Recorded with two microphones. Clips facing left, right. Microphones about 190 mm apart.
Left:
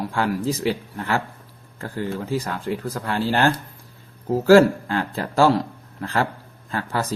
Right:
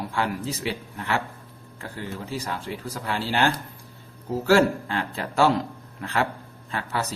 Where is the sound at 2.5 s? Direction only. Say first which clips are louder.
Left 5 dB; 50° left (ahead or behind).